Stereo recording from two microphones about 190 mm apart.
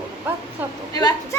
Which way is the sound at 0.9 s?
20° left (ahead or behind).